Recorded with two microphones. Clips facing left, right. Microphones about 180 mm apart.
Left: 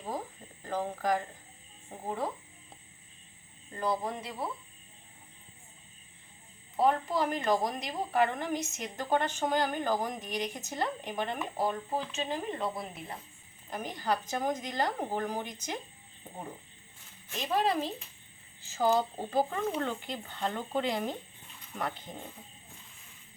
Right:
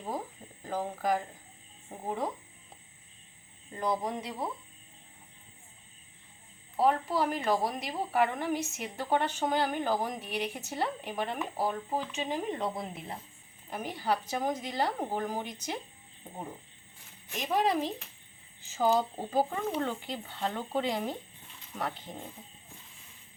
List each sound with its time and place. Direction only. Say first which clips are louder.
0.6 s speech: even; 10° right (ahead or behind)
3.7 s speech: right 1 dB; 15° right (ahead or behind)
6.7 s a woman's voice: even; 5° right (ahead or behind); by 13.1 s 25° right (ahead or behind)
13.7 s a woman's voice: right 1 dB; 10° right (ahead or behind)